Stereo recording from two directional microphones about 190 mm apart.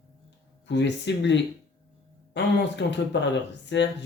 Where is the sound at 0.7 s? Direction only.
65° left (ahead or behind).